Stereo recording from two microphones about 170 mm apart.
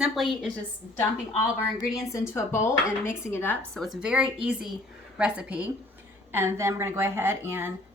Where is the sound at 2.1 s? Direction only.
15° left (ahead or behind).